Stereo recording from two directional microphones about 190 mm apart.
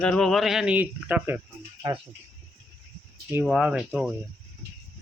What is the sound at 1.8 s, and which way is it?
Speech, 20° right (ahead or behind).